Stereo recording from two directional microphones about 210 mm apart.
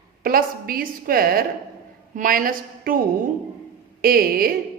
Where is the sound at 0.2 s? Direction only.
45° right (ahead or behind).